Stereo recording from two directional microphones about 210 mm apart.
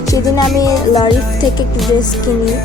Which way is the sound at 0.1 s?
15° left (ahead or behind).